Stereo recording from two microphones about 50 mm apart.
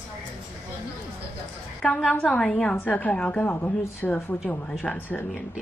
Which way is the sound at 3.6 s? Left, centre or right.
Left.